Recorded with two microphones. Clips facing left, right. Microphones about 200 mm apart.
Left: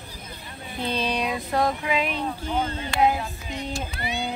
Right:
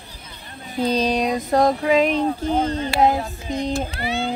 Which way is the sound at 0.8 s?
40° right (ahead or behind).